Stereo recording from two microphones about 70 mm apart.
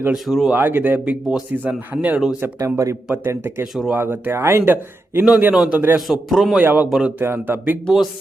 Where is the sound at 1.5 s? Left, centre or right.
Right.